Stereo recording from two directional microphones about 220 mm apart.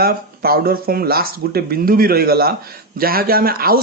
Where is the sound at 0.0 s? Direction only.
45° right (ahead or behind).